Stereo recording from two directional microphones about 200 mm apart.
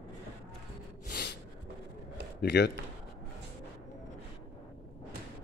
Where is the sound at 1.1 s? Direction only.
50° left (ahead or behind).